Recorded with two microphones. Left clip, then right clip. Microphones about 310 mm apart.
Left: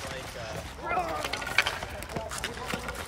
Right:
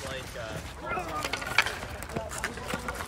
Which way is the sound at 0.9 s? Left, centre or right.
Left.